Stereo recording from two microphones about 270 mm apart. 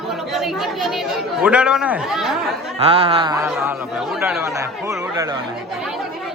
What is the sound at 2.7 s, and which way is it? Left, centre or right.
A man's voice, right.